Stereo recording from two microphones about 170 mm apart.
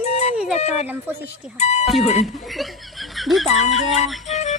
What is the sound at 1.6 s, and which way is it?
Speech, 40° left (ahead or behind).